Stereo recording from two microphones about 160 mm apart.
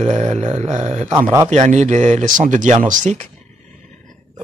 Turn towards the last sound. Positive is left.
turn(degrees=-50)  # may be behind; listen again after turning